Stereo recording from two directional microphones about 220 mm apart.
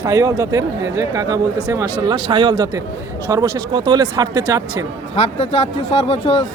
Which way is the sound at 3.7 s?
20° right (ahead or behind).